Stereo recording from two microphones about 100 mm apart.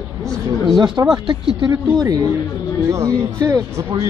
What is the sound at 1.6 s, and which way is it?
Speech, 40° right (ahead or behind).